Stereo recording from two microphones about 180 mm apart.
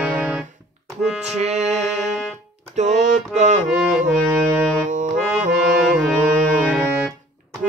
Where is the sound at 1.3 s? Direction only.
40° right (ahead or behind).